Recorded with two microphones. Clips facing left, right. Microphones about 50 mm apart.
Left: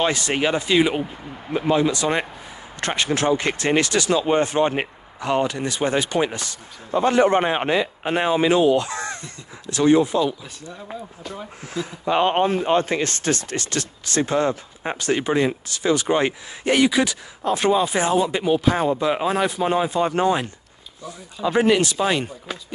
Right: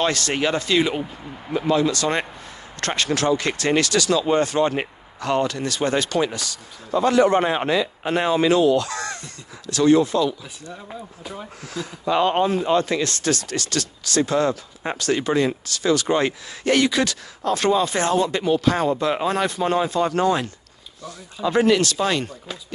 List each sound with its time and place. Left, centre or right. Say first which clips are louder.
0.0 s speech: left 1 dB; centre
11.6 s speech: left 1 dB; left